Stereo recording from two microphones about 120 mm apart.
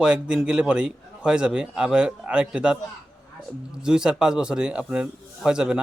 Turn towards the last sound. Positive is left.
turn(degrees=-5)  # may be behind; listen again after turning